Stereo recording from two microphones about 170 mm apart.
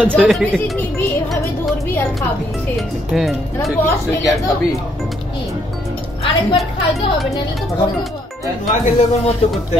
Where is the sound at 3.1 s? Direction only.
Centre (ahead or behind).